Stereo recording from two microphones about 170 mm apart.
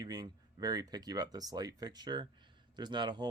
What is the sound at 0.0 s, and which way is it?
Speech, 25° right (ahead or behind).